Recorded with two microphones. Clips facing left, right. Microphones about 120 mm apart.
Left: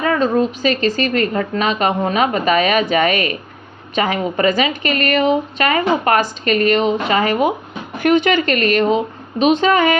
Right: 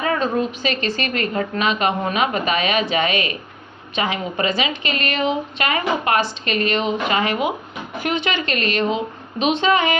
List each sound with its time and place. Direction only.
0.0 s a woman's voice: 40° left (ahead or behind)